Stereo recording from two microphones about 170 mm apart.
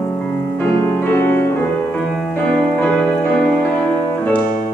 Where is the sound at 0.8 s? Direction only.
15° left (ahead or behind).